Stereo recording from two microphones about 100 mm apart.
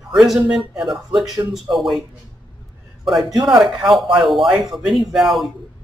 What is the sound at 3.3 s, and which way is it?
Speech, 40° right (ahead or behind).